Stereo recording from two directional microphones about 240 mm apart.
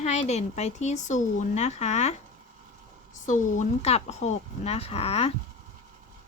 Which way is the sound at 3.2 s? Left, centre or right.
Left.